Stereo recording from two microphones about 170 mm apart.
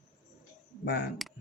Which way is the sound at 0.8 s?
70° left (ahead or behind).